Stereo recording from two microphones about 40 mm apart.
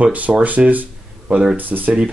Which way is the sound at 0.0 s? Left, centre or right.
Right.